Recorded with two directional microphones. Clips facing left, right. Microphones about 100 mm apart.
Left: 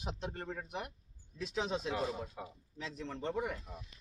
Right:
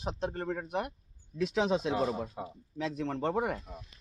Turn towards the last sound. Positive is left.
turn(degrees=-60)  # may be behind; listen again after turning